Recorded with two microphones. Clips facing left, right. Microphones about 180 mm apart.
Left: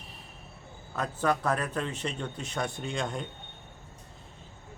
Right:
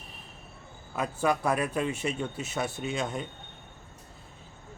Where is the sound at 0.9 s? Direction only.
10° right (ahead or behind).